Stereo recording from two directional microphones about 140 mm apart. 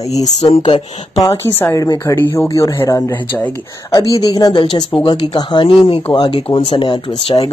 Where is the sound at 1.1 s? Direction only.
25° left (ahead or behind).